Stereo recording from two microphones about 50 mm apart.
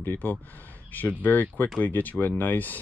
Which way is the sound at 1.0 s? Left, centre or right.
Left.